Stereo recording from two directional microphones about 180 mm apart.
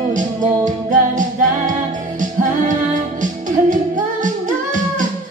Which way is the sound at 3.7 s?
45° right (ahead or behind).